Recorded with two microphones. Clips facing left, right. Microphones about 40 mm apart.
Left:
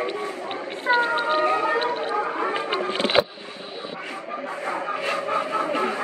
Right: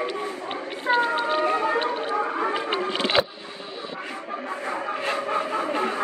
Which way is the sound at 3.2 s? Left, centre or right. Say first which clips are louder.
Left 3 dB; left.